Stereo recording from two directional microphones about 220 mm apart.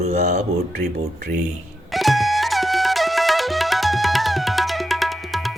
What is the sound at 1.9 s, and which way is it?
Music, centre (ahead or behind).